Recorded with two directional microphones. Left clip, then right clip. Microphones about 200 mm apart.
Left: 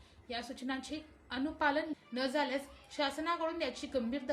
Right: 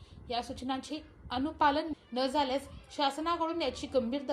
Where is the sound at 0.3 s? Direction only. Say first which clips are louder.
Right 5 dB; 15° right (ahead or behind).